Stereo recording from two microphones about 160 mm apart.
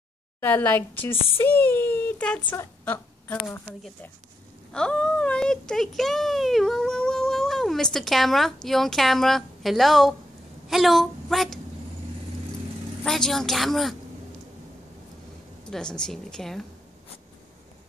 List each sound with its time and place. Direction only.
0.4 s speech: 10° left (ahead or behind)
2.8 s a sound: 10° left (ahead or behind)
4.7 s a woman's voice: 5° left (ahead or behind)
13.0 s a woman's voice: centre (ahead or behind)
15.7 s a woman's voice: 5° left (ahead or behind)